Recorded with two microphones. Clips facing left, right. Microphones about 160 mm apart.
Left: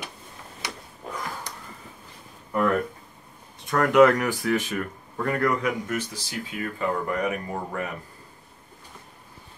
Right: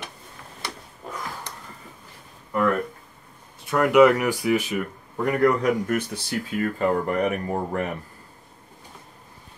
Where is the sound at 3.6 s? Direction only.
5° right (ahead or behind).